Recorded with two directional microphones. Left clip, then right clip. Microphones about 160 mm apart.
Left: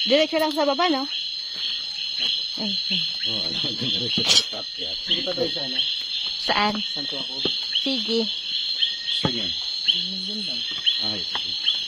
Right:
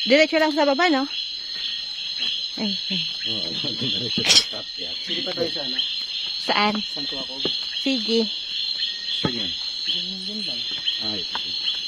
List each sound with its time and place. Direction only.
0.0 s speech: 30° right (ahead or behind)
4.2 s speech: 30° right (ahead or behind)
6.4 s speech: 15° right (ahead or behind)
7.8 s speech: 20° right (ahead or behind)